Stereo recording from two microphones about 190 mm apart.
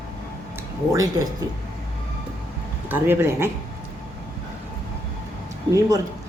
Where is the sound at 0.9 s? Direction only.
20° right (ahead or behind).